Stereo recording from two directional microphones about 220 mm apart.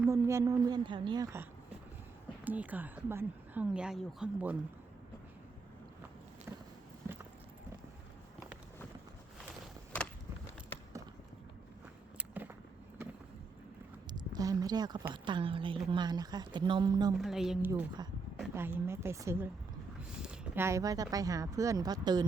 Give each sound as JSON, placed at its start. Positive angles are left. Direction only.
{"t": 0.0, "sound": "speech", "side_deg": -10}
{"t": 12.1, "sound": "a sound", "side_deg": -10}
{"t": 14.1, "sound": "a woman's voice", "side_deg": -15}
{"t": 17.2, "sound": "speech", "side_deg": 0}
{"t": 17.7, "sound": "speech", "side_deg": -15}